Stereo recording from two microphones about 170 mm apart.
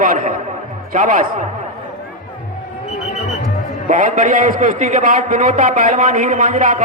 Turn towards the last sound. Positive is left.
turn(degrees=-50)  # may be behind; listen again after turning